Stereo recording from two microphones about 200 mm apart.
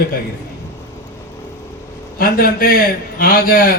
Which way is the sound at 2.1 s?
50° left (ahead or behind).